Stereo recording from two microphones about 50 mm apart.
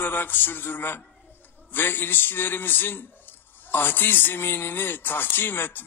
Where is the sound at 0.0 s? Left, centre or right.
Left.